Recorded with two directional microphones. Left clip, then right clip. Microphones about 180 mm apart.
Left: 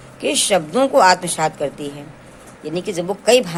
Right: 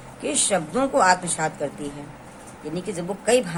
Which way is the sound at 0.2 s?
25° left (ahead or behind).